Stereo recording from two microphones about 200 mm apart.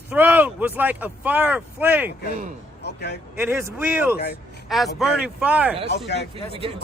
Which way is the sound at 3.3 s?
15° right (ahead or behind).